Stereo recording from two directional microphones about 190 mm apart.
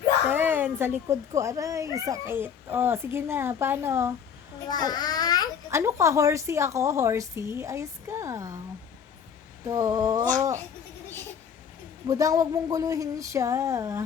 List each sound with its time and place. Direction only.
0.3 s speech: 10° right (ahead or behind)
4.9 s a sound: 20° left (ahead or behind)
5.7 s speech: 15° right (ahead or behind)
9.6 s speech: 20° right (ahead or behind)
12.0 s speech: 15° right (ahead or behind)